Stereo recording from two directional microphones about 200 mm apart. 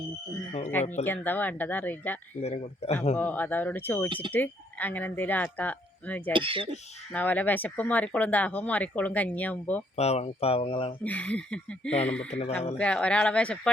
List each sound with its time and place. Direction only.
0.7 s speech: 10° left (ahead or behind)
2.4 s speech: 30° left (ahead or behind)
3.2 s speech: 10° left (ahead or behind)
6.3 s speech: 25° right (ahead or behind)
7.1 s speech: 10° left (ahead or behind)
9.9 s speech: 30° left (ahead or behind)
11.0 s speech: 5° left (ahead or behind)